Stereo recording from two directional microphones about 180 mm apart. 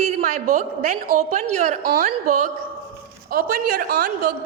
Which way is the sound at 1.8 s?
55° right (ahead or behind).